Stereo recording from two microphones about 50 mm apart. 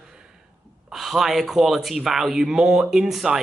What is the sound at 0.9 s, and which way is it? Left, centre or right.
A man's voice, centre.